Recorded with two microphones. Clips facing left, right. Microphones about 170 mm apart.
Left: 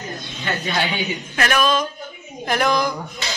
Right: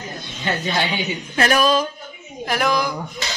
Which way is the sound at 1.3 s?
35° right (ahead or behind).